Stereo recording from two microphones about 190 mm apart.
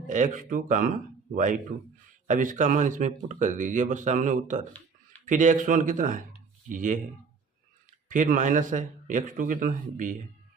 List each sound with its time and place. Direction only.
0.1 s a man's voice: 45° right (ahead or behind)
2.2 s a man's voice: 40° right (ahead or behind)
8.1 s a man's voice: 40° right (ahead or behind)